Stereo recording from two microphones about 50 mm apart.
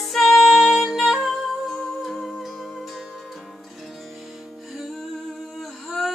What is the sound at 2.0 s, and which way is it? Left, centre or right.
Music, centre.